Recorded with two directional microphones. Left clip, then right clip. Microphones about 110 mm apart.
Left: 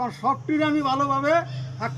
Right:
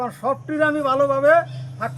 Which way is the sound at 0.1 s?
45° right (ahead or behind).